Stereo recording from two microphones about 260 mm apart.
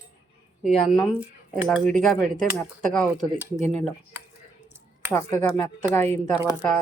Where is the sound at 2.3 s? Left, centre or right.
Right.